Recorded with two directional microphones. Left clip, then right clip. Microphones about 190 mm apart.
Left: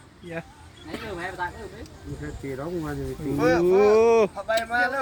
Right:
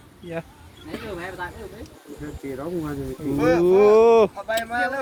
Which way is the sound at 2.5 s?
50° right (ahead or behind).